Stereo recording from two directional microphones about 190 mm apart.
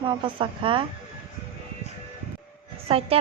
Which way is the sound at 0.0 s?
25° right (ahead or behind).